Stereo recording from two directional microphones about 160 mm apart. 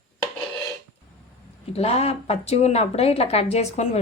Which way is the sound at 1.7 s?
40° left (ahead or behind).